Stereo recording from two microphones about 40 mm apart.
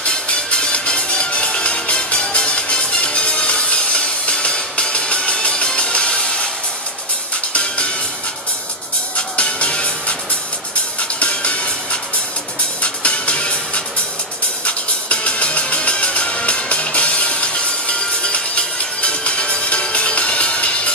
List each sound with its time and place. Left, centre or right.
0.0 s music: left
7.5 s music: left
9.1 s music: left